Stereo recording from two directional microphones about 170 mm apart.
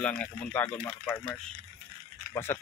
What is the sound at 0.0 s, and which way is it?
Speech, 10° left (ahead or behind).